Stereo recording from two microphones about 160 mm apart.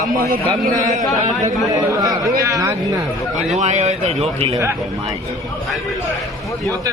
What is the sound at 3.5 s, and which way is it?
Speech, 45° right (ahead or behind).